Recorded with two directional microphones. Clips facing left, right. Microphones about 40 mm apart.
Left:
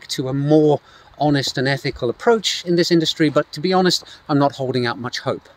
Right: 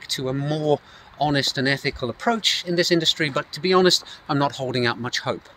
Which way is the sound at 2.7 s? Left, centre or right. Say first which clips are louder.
Left 5 dB; right.